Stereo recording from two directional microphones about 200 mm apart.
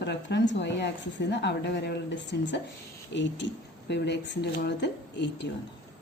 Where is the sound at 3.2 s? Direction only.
65° left (ahead or behind).